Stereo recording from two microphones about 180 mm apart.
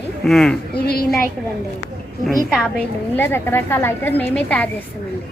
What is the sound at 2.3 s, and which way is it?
A woman's voice, centre (ahead or behind).